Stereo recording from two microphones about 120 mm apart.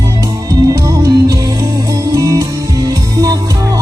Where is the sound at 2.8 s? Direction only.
25° right (ahead or behind).